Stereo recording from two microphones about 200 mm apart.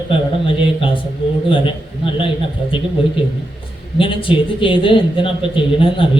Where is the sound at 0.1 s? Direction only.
25° left (ahead or behind).